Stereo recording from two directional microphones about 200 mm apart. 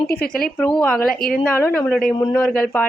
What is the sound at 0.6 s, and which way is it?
A woman's voice, 5° left (ahead or behind).